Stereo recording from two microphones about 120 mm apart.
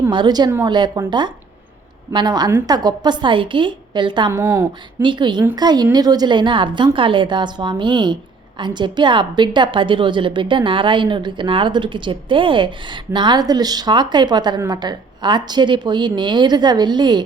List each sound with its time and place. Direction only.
0.1 s a woman's voice: 40° right (ahead or behind)
2.1 s a woman's voice: 35° right (ahead or behind)
4.3 s speech: 20° right (ahead or behind)
5.0 s a woman's voice: 40° right (ahead or behind)